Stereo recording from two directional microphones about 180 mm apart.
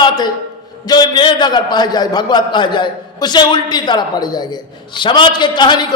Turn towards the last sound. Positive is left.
turn(degrees=25)  # may be behind; listen again after turning